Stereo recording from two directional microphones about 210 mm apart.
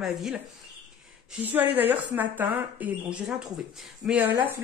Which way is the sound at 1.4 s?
10° right (ahead or behind).